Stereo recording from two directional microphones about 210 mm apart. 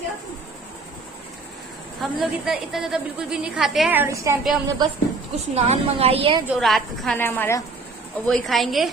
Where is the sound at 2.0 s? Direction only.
Centre (ahead or behind).